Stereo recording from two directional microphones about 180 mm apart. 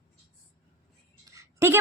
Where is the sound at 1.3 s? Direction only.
15° right (ahead or behind).